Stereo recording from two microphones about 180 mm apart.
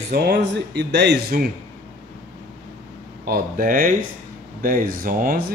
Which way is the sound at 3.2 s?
50° right (ahead or behind).